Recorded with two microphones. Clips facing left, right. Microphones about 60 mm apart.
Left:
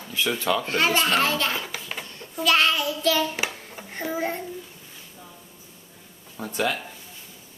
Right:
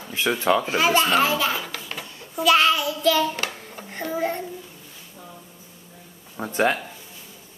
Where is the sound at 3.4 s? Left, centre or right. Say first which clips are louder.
Right 1 dB; centre.